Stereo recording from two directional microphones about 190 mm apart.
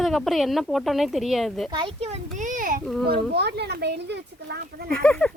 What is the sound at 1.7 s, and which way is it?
Speech, 30° right (ahead or behind).